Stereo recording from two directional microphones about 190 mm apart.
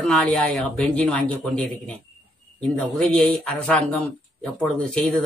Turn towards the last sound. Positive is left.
turn(degrees=5)  # may be behind; listen again after turning